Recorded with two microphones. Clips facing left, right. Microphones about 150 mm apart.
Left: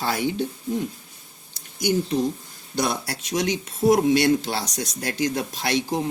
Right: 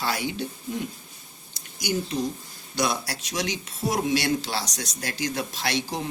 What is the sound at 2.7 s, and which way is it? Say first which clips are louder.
Speech: left 1 dB; 50° left (ahead or behind).